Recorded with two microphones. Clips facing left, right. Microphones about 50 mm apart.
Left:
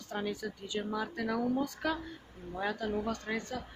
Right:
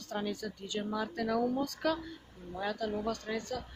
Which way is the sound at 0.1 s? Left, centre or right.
Centre.